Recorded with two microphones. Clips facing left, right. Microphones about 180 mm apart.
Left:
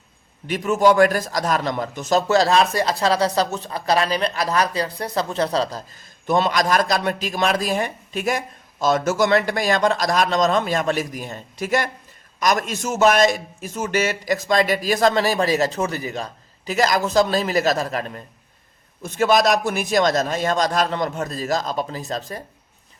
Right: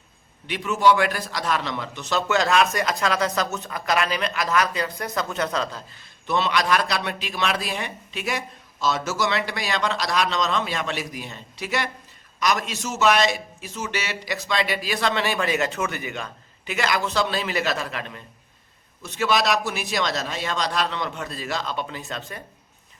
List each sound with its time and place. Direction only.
0.4 s a man's voice: 45° left (ahead or behind)